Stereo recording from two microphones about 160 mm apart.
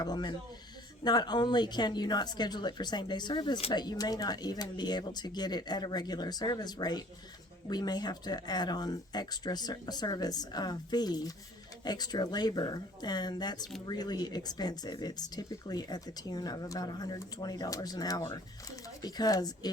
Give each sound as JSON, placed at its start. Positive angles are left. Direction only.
{"t": 0.0, "sound": "speech", "side_deg": 25}